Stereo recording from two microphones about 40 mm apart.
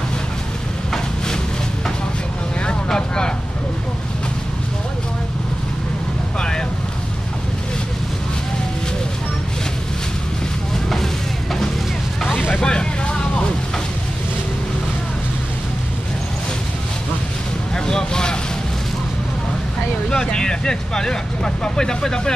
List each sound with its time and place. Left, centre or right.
2.6 s vehicle: left
12.5 s vehicle: left
17.8 s vehicle: centre
20.1 s vehicle: centre